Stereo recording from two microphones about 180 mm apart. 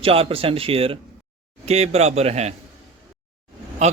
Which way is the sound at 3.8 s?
40° right (ahead or behind).